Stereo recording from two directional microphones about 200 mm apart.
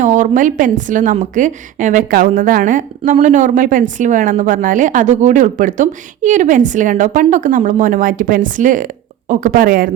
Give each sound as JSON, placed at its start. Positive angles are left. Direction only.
{"t": 0.0, "sound": "a woman's voice", "side_deg": -40}